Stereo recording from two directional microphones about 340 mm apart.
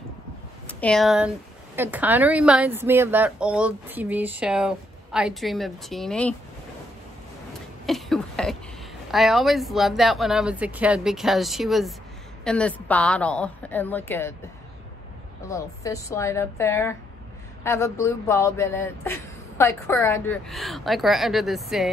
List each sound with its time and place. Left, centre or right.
0.7 s a woman's voice: centre
7.8 s a sound: centre
9.1 s a woman's voice: centre
15.4 s speech: centre